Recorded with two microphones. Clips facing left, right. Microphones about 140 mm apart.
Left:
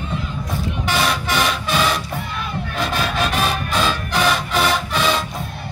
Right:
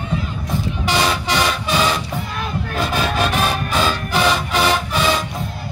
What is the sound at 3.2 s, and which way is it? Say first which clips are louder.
Music: right 1 dB; centre (ahead or behind).